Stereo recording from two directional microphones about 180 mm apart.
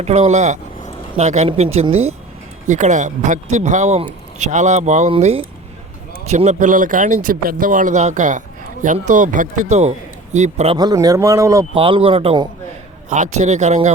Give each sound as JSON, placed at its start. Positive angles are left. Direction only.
{"t": 0.0, "sound": "speech", "side_deg": -35}
{"t": 10.8, "sound": "speech", "side_deg": -20}
{"t": 11.7, "sound": "speech", "side_deg": -30}
{"t": 13.1, "sound": "speech", "side_deg": -45}